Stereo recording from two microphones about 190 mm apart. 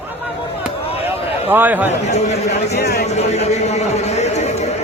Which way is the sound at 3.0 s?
35° left (ahead or behind).